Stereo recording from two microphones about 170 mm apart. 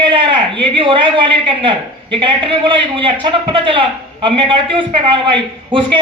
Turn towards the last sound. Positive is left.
turn(degrees=-30)  # may be behind; listen again after turning